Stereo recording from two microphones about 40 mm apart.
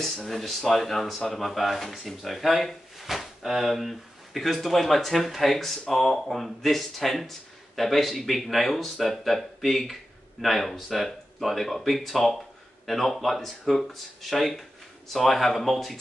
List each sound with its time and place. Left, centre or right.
0.0 s speech: centre